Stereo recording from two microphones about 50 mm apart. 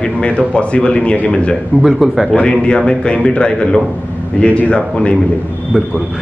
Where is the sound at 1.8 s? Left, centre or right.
Centre.